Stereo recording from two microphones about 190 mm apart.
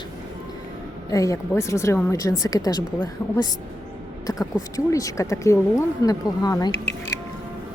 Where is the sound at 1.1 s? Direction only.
15° left (ahead or behind).